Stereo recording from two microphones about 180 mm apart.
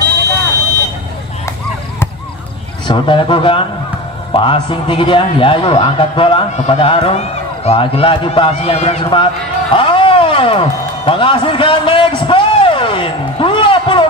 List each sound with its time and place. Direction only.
2.9 s a man's voice: 25° left (ahead or behind)